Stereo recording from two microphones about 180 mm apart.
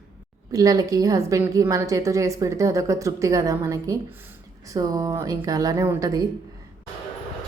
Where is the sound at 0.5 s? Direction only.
20° right (ahead or behind).